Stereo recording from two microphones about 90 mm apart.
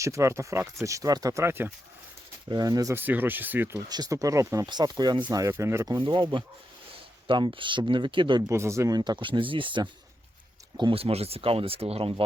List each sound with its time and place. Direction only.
0.0 s speech: 35° right (ahead or behind)
2.5 s speech: 45° right (ahead or behind)
2.9 s speech: 20° right (ahead or behind)
3.8 s speech: 45° right (ahead or behind)
4.6 s speech: 50° right (ahead or behind)
5.5 s speech: 30° right (ahead or behind)
5.8 s speech: 45° right (ahead or behind)
6.1 s speech: 65° right (ahead or behind)
8.4 s speech: 30° right (ahead or behind)
9.0 s speech: 60° right (ahead or behind); by 12.2 s 90° right